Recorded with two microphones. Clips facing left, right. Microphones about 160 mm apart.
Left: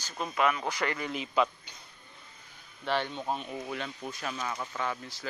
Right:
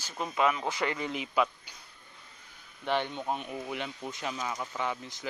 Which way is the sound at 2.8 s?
15° right (ahead or behind).